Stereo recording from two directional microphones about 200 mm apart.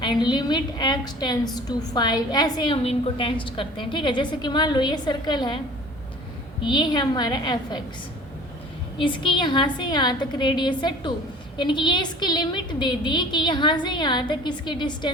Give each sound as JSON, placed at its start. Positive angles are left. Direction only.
{"t": 0.0, "sound": "a woman's voice", "side_deg": 20}
{"t": 6.6, "sound": "a woman's voice", "side_deg": 25}
{"t": 9.0, "sound": "a woman's voice", "side_deg": 25}